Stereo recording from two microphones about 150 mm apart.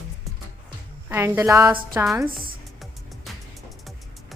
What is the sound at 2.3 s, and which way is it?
Music, centre (ahead or behind).